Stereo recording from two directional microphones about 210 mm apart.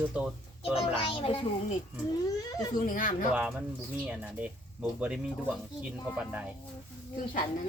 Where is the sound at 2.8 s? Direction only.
40° left (ahead or behind).